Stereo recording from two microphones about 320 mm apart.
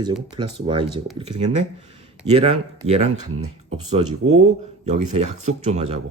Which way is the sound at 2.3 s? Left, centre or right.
Centre.